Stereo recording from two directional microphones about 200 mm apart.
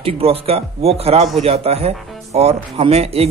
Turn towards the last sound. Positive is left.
turn(degrees=-30)  # may be behind; listen again after turning